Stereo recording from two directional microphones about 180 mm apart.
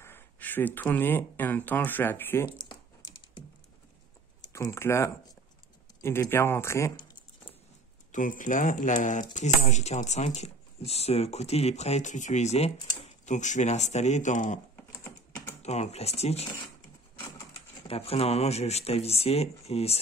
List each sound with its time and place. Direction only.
0.0 s speech: 10° left (ahead or behind)
2.5 s typing: 25° left (ahead or behind)
4.5 s speech: 15° left (ahead or behind)
8.1 s speech: 45° left (ahead or behind)
15.6 s speech: 35° left (ahead or behind)
17.8 s speech: 35° left (ahead or behind)